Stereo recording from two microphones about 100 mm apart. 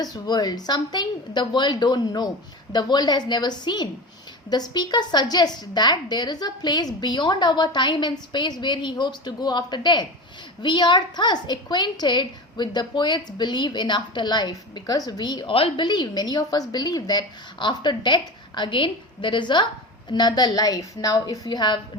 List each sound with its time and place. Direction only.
0.0 s a woman's voice: 40° left (ahead or behind)
15.5 s a woman's voice: 60° left (ahead or behind); by 21.8 s 45° left (ahead or behind)